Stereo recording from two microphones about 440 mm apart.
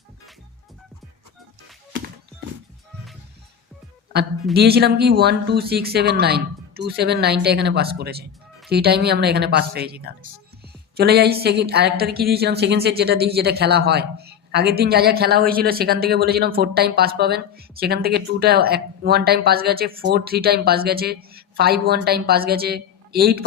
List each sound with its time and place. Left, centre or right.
4.5 s a woman's voice: right